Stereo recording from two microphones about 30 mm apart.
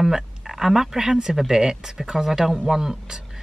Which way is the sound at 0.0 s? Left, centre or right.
Centre.